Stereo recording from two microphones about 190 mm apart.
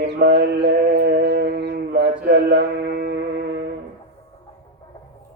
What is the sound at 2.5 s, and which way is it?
Music, 55° right (ahead or behind).